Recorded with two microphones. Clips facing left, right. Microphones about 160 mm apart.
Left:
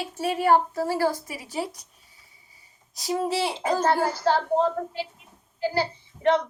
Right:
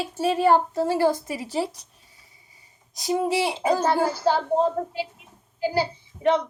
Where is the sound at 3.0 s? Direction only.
15° right (ahead or behind).